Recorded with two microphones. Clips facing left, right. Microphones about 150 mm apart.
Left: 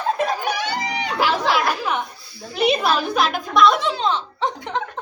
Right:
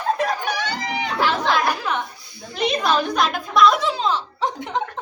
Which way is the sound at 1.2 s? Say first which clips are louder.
Left 1 dB; 10° left (ahead or behind).